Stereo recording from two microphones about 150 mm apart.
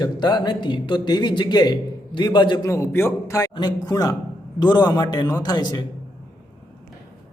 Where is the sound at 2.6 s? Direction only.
20° left (ahead or behind).